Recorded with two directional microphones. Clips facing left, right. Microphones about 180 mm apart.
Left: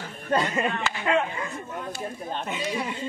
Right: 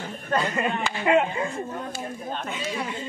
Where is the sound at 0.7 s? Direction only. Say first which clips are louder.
Right 3 dB; 15° right (ahead or behind).